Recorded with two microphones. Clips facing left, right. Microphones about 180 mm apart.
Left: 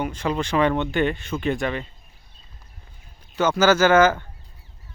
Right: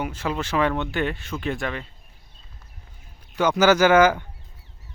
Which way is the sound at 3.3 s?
15° right (ahead or behind).